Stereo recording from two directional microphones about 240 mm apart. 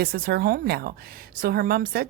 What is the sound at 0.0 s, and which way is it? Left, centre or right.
A woman's voice, right.